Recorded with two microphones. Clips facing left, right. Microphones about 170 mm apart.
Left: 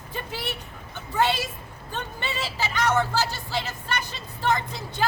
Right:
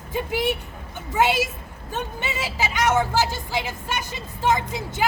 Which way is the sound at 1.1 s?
10° right (ahead or behind).